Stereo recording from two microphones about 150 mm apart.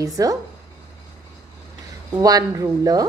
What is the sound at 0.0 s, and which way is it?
Speech, 25° right (ahead or behind).